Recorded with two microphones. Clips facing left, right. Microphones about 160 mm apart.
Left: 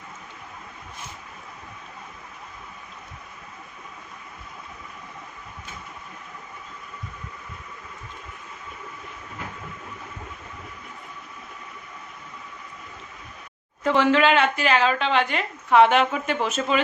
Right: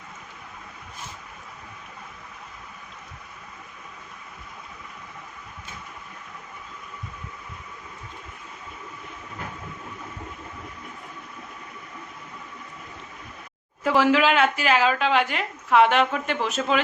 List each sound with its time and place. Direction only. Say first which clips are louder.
13.8 s a woman's voice: left 1 dB; 5° right (ahead or behind)